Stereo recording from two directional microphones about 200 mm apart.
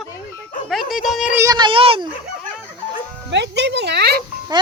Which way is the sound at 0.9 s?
Centre (ahead or behind).